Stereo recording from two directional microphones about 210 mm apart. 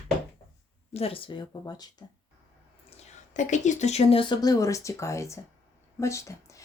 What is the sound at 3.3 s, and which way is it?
A woman's voice, 35° left (ahead or behind).